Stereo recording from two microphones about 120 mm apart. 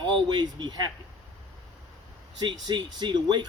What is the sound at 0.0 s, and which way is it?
Speech, 35° right (ahead or behind).